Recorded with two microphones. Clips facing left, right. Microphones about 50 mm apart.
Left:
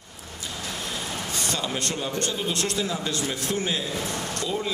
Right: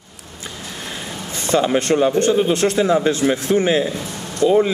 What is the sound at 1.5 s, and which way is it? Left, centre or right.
Speech, right.